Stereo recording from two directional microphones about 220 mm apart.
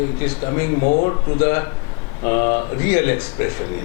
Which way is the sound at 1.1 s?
15° left (ahead or behind).